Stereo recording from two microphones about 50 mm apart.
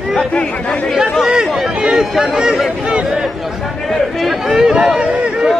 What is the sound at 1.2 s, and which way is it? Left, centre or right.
Speech, centre.